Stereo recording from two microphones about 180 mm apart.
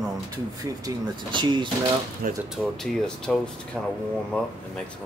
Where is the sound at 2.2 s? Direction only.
55° right (ahead or behind).